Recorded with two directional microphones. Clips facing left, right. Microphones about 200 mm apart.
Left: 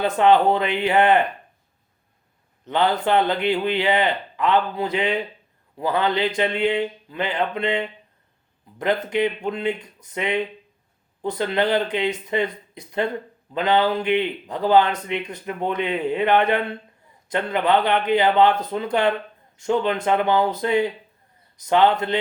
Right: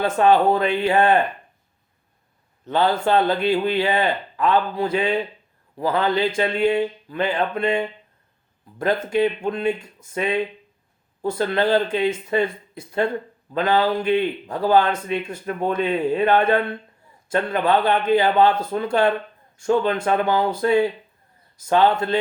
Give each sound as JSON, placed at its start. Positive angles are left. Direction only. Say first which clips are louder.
{"t": 0.2, "sound": "speech", "louder": "even", "side_deg": 20}
{"t": 2.6, "sound": "speech", "louder": "right 1 dB", "side_deg": 20}
{"t": 9.0, "sound": "speech", "louder": "right 2 dB", "side_deg": 20}